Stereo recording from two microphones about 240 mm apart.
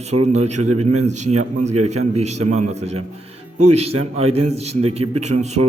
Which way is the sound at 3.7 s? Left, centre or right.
Right.